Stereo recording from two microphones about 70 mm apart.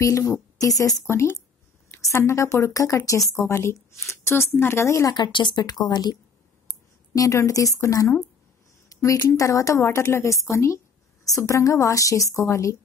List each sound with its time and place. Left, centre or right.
0.0 s a woman's voice: left
1.0 s a woman's voice: left
5.1 s speech: left
6.7 s speech: left
8.8 s a sound: left
9.4 s a woman's voice: left